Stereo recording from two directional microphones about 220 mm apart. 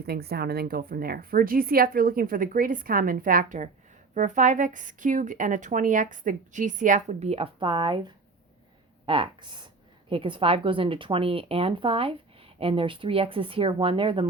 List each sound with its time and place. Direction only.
0.0 s speech: 45° right (ahead or behind); by 14.3 s 25° right (ahead or behind)